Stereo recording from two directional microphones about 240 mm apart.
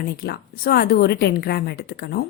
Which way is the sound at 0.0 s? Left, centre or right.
Left.